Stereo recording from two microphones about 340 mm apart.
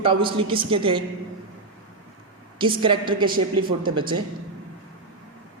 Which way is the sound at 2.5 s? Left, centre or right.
Centre.